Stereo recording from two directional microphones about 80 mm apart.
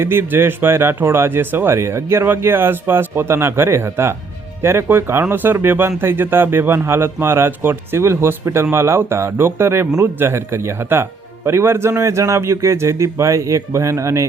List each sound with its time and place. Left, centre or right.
0.0 s speech: right